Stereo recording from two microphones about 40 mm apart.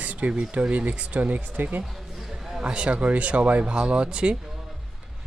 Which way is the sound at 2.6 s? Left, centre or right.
Right.